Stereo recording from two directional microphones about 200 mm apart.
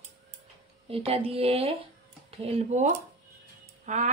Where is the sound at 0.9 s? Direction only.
30° right (ahead or behind).